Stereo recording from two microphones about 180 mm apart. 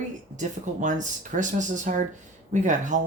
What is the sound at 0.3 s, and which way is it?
Speech, 45° right (ahead or behind).